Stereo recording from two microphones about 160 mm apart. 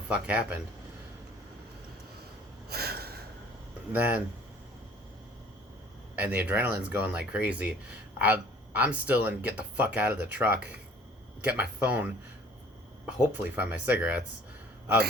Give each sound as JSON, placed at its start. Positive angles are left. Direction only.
{"t": 0.1, "sound": "speech", "side_deg": -10}
{"t": 2.6, "sound": "gasp", "side_deg": -80}
{"t": 3.9, "sound": "speech", "side_deg": -10}
{"t": 6.1, "sound": "speech", "side_deg": -10}